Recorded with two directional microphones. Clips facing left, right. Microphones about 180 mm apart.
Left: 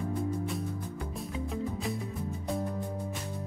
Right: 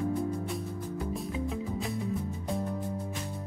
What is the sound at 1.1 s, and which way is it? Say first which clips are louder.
Music: even; centre (ahead or behind).